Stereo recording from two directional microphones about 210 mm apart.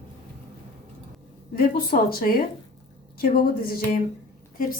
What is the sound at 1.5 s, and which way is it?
Speech, 45° left (ahead or behind).